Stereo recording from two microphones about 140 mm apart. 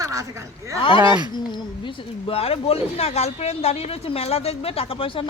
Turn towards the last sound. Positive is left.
turn(degrees=40)  # may be behind; listen again after turning